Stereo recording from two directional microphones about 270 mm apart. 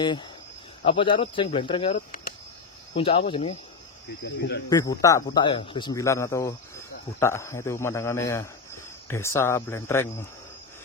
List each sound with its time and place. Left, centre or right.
0.8 s speech: centre
3.0 s speech: centre
4.2 s speech: left
4.6 s a man's voice: centre